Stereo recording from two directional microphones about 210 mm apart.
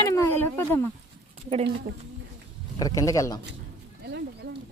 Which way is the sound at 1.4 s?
30° right (ahead or behind).